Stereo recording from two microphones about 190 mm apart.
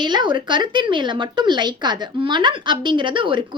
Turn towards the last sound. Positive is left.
turn(degrees=-25)  # may be behind; listen again after turning